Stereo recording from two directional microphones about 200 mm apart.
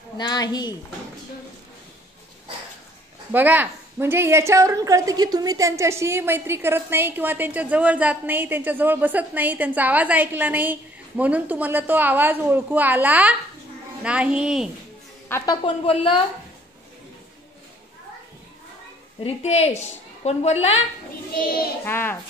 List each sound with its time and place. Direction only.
0.2 s a woman's voice: 20° left (ahead or behind)
3.3 s a woman's voice: 10° right (ahead or behind)
15.2 s a woman's voice: 10° left (ahead or behind)
15.6 s a woman's voice: 25° left (ahead or behind)
19.2 s a woman's voice: 30° left (ahead or behind)
21.8 s a child's voice: 10° left (ahead or behind)